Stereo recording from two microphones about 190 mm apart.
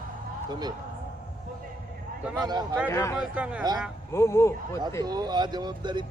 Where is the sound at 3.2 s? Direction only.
5° right (ahead or behind).